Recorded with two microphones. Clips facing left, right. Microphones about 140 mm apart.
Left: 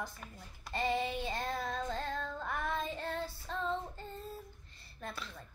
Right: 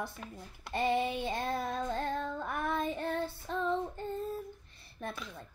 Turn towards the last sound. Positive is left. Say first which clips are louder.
# right 3 dB
turn(degrees=-20)  # may be behind; listen again after turning